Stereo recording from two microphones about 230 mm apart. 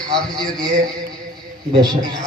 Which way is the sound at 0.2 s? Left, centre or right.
Centre.